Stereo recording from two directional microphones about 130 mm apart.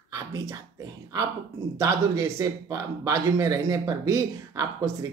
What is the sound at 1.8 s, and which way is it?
Speech, 20° right (ahead or behind).